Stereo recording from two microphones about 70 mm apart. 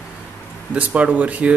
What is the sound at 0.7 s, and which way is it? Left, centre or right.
Speech, centre.